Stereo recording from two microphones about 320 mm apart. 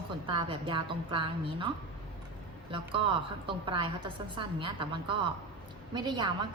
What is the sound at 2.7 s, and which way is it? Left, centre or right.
A woman's voice, centre.